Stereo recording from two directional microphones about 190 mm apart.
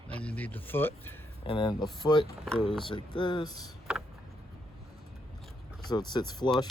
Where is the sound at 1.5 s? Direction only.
25° left (ahead or behind).